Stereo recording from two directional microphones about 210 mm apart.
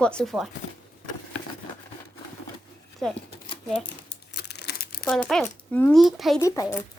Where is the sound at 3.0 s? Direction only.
Centre (ahead or behind).